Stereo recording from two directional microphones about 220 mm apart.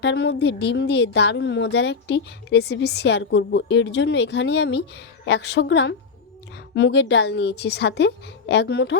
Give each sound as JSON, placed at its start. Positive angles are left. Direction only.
{"t": 0.0, "sound": "a woman's voice", "side_deg": 50}